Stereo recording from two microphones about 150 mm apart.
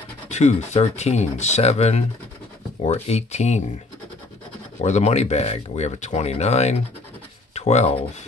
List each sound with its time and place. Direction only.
0.3 s speech: 50° left (ahead or behind)
4.8 s speech: 50° left (ahead or behind)